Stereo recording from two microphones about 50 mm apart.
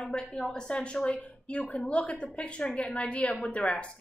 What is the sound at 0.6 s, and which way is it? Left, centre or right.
A woman's voice, left.